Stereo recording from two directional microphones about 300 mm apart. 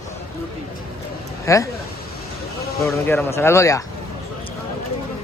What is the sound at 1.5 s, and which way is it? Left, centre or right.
Speech, centre.